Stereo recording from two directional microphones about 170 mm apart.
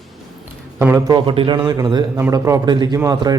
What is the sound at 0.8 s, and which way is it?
Speech, 15° right (ahead or behind).